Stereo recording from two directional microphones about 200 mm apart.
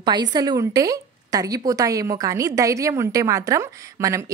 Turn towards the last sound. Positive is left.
turn(degrees=-15)  # may be behind; listen again after turning